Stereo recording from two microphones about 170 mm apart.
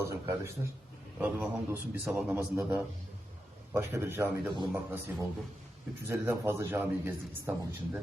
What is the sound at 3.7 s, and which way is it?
A man's voice, 15° right (ahead or behind).